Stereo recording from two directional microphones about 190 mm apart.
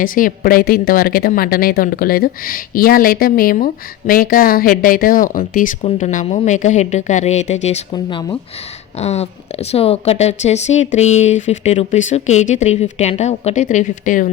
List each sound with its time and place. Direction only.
0.0 s a woman's voice: 45° left (ahead or behind)
7.9 s speech: 20° left (ahead or behind)
9.0 s a woman's voice: 35° left (ahead or behind)